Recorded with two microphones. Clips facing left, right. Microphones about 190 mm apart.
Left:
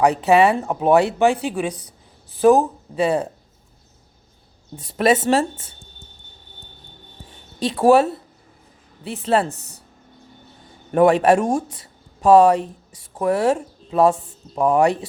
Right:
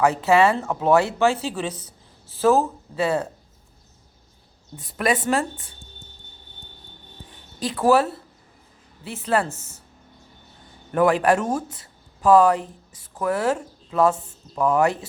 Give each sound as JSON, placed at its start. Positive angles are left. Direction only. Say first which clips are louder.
{"t": 0.0, "sound": "speech", "louder": "left 3 dB", "side_deg": 20}
{"t": 4.9, "sound": "speech", "louder": "left 5 dB", "side_deg": 25}
{"t": 7.6, "sound": "speech", "louder": "left 4 dB", "side_deg": 25}
{"t": 10.9, "sound": "speech", "louder": "left 4 dB", "side_deg": 25}